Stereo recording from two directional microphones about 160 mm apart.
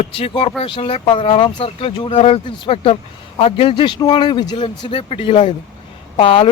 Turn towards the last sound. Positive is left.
turn(degrees=35)  # may be behind; listen again after turning